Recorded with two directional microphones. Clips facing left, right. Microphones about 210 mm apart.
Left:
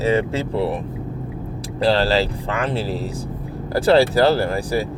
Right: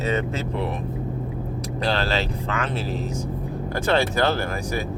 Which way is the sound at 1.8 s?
35° left (ahead or behind).